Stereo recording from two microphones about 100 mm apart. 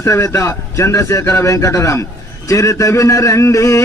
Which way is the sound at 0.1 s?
30° left (ahead or behind).